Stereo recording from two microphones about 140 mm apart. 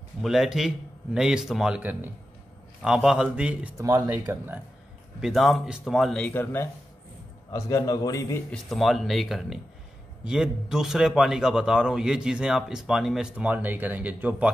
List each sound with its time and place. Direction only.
0.2 s a man's voice: centre (ahead or behind)
3.7 s speech: 25° right (ahead or behind)
5.2 s a man's voice: centre (ahead or behind); by 8.4 s 25° left (ahead or behind)
8.5 s a man's voice: centre (ahead or behind)